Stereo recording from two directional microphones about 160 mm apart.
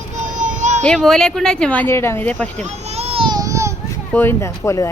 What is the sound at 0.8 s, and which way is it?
Speech, 5° left (ahead or behind).